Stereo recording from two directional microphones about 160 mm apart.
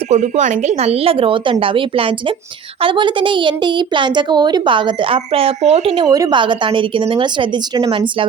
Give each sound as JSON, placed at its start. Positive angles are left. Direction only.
{"t": 0.1, "sound": "a woman's voice", "side_deg": -45}
{"t": 6.1, "sound": "a woman's voice", "side_deg": -25}